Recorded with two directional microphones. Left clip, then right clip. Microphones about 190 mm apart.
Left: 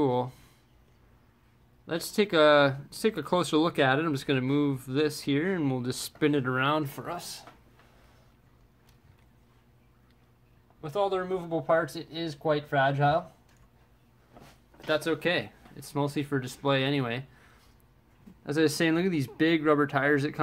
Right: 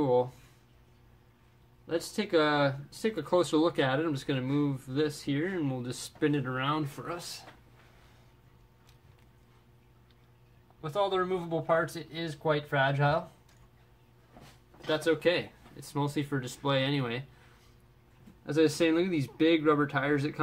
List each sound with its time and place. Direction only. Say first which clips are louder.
0.0 s speech: right 1 dB; 45° left (ahead or behind)
1.9 s speech: left 3 dB; 45° left (ahead or behind)
10.8 s speech: left 1 dB; 25° left (ahead or behind); by 13.2 s 10° left (ahead or behind)
14.9 s speech: even; 35° left (ahead or behind)
18.4 s speech: even; 35° left (ahead or behind)